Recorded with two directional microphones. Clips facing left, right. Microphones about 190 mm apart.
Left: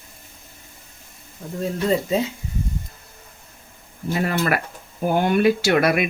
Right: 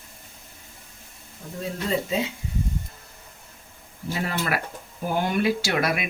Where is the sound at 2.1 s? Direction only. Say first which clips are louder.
Left 5 dB; 40° left (ahead or behind).